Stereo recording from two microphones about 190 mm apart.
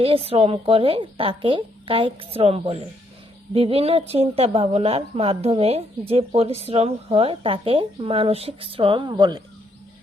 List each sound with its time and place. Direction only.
0.0 s a woman's voice: 30° right (ahead or behind)